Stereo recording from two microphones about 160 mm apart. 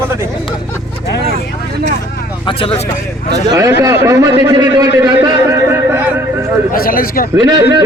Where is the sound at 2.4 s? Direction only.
35° left (ahead or behind).